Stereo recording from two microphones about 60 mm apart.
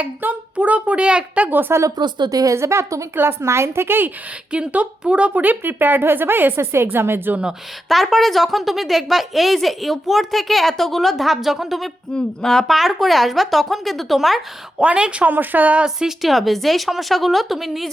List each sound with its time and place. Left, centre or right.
0.2 s a woman's voice: right
1.5 s a woman's voice: right
2.3 s a woman's voice: right
2.6 s speech: right
3.2 s speech: right
4.5 s a woman's voice: right
7.9 s speech: centre
12.1 s speech: centre
14.8 s speech: centre
16.0 s speech: centre